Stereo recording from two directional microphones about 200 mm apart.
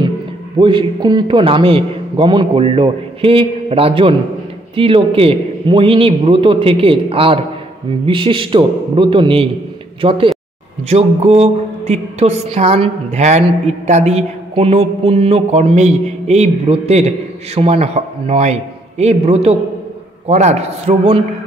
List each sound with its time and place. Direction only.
0.6 s a man's voice: 25° right (ahead or behind)
10.9 s mantra: 30° right (ahead or behind)